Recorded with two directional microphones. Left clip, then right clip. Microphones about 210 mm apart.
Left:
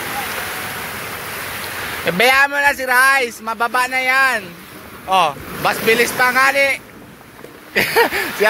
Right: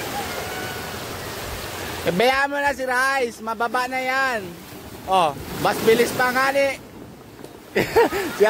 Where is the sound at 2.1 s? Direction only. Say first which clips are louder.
Left 6 dB; 15° right (ahead or behind).